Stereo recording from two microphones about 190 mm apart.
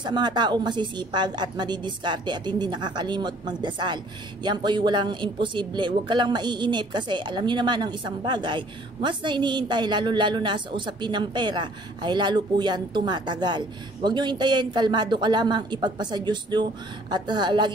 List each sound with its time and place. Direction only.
0.0 s a woman's voice: 25° right (ahead or behind)